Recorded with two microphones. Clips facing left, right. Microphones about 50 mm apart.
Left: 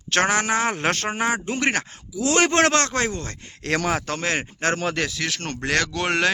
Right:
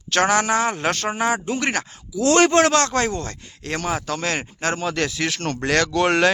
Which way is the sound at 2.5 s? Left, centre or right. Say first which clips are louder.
Right 2 dB; left.